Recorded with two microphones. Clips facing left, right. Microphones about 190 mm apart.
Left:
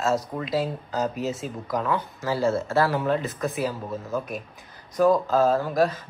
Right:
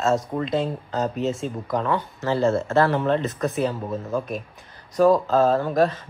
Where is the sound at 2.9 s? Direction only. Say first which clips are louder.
Right 3 dB; 5° left (ahead or behind).